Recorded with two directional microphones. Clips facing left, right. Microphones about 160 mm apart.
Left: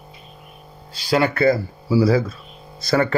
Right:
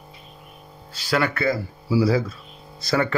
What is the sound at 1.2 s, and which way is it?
Speech, 35° left (ahead or behind).